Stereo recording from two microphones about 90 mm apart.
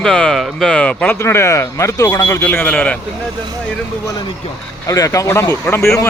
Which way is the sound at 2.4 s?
20° left (ahead or behind).